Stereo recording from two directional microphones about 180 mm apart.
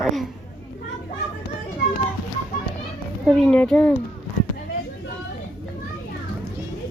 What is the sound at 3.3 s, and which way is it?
Speech, centre (ahead or behind).